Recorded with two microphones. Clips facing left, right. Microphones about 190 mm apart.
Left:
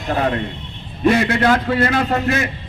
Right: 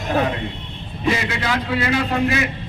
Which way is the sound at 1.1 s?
55° left (ahead or behind).